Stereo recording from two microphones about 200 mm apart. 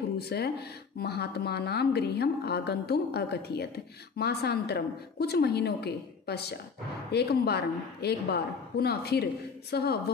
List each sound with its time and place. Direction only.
0.3 s a woman's voice: 55° left (ahead or behind)